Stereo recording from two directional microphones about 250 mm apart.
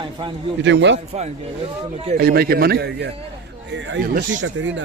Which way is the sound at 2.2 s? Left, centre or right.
Right.